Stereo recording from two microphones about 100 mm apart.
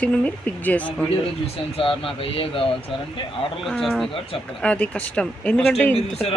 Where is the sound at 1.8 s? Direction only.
70° left (ahead or behind).